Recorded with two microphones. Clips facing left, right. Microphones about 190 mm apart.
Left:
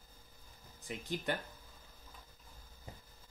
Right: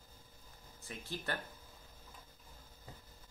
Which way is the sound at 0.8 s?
15° left (ahead or behind).